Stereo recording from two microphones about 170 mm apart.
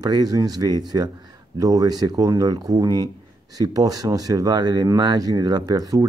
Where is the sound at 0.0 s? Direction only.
20° right (ahead or behind).